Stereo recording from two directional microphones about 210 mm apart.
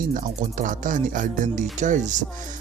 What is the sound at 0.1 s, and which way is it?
Speech, 40° right (ahead or behind).